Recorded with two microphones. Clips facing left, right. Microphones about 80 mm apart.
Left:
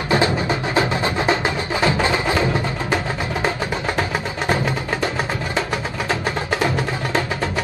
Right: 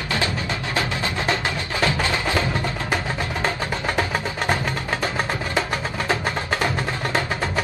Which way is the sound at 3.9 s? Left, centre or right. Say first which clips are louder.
Left 1 dB; centre.